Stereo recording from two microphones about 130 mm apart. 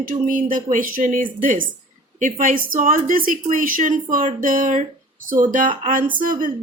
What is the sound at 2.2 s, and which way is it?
Speech, 80° right.